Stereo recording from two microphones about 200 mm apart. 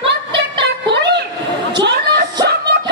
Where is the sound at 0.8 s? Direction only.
60° right (ahead or behind).